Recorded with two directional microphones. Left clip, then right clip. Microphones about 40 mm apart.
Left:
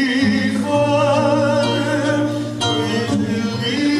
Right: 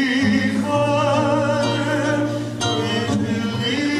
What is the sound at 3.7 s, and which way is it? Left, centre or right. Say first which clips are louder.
Music: left 4 dB; right.